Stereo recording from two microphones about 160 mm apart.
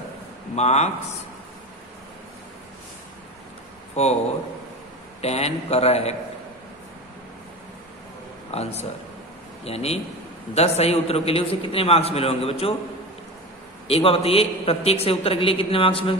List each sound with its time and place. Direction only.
0.6 s speech: 45° left (ahead or behind)
3.9 s speech: 40° left (ahead or behind)
5.2 s a man's voice: 40° left (ahead or behind)
8.5 s a man's voice: 40° left (ahead or behind)
13.8 s a man's voice: 35° left (ahead or behind)